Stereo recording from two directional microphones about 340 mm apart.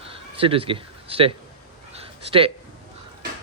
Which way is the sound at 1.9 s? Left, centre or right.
Centre.